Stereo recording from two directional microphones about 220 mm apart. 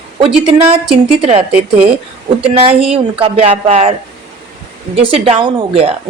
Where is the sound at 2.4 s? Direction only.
25° right (ahead or behind).